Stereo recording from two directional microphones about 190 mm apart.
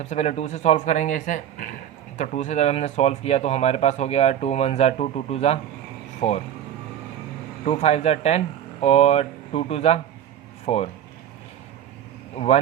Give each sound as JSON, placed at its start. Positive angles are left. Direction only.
{"t": 0.0, "sound": "speech", "side_deg": 35}
{"t": 7.6, "sound": "speech", "side_deg": 35}